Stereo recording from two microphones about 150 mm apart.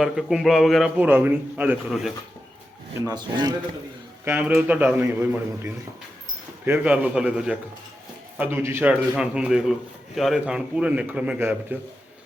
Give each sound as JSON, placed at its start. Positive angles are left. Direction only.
{"t": 0.0, "sound": "a man's voice", "side_deg": -5}
{"t": 3.1, "sound": "a man's voice", "side_deg": -25}
{"t": 4.3, "sound": "a man's voice", "side_deg": -10}